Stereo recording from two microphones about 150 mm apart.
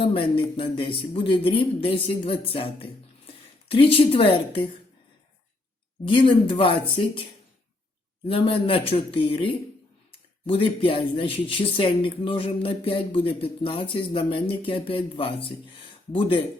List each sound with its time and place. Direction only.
0.0 s speech: 35° left (ahead or behind)
6.1 s speech: 35° left (ahead or behind)
8.3 s speech: 40° left (ahead or behind)